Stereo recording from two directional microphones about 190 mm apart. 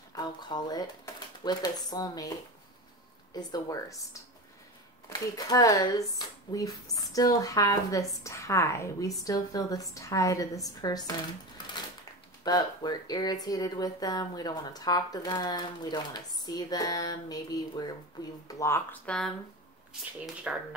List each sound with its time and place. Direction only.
0.1 s speech: 20° left (ahead or behind)
3.3 s speech: 20° left (ahead or behind)
5.1 s a woman's voice: 20° left (ahead or behind)
20.5 s speech: 5° right (ahead or behind)